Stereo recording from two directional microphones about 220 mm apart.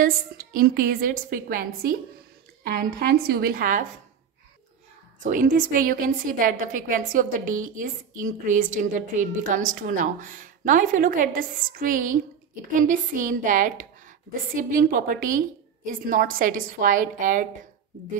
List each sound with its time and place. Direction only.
0.5 s a woman's voice: 40° right (ahead or behind)
5.2 s a woman's voice: 35° right (ahead or behind)